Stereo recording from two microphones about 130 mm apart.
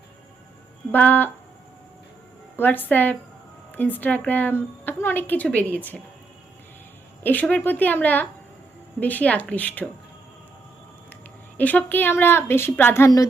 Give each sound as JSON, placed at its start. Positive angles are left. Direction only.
{"t": 0.9, "sound": "a woman's voice", "side_deg": 15}
{"t": 2.6, "sound": "a woman's voice", "side_deg": 15}
{"t": 7.2, "sound": "a woman's voice", "side_deg": 15}
{"t": 11.5, "sound": "a woman's voice", "side_deg": 10}